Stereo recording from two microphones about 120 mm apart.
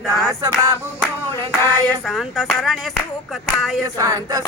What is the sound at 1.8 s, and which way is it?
Clapping, centre (ahead or behind).